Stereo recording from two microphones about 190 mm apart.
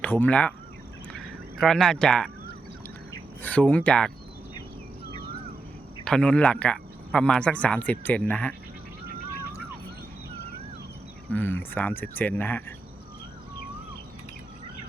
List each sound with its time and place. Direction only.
0.0 s speech: 10° left (ahead or behind)
1.1 s a sound: 5° left (ahead or behind)
3.4 s speech: 5° left (ahead or behind)
6.1 s speech: 5° left (ahead or behind)
11.3 s speech: 10° left (ahead or behind)